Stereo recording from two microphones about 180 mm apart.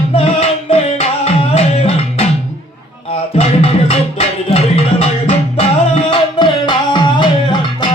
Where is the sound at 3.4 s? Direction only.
30° left (ahead or behind).